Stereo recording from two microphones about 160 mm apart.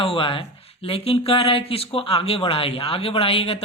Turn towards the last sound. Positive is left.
turn(degrees=35)  # may be behind; listen again after turning